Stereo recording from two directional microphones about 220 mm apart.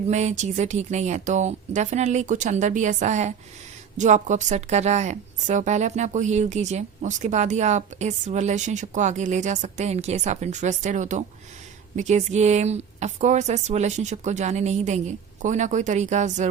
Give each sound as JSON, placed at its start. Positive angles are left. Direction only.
{"t": 0.1, "sound": "a woman's voice", "side_deg": -30}